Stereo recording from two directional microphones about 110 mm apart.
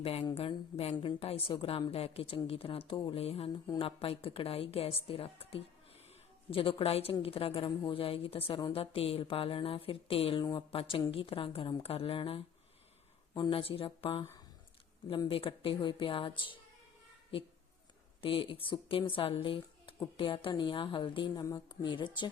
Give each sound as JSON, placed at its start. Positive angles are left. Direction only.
{"t": 0.0, "sound": "a woman's voice", "side_deg": 65}
{"t": 15.3, "sound": "speech", "side_deg": 55}
{"t": 18.2, "sound": "speech", "side_deg": 55}
{"t": 21.4, "sound": "a woman's voice", "side_deg": 35}